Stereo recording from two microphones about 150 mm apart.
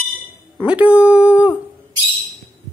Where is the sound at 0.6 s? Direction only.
10° right (ahead or behind).